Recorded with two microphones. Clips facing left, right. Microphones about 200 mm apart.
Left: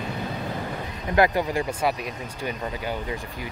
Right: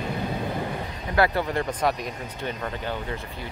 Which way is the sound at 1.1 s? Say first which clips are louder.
Left 2 dB; 15° left (ahead or behind).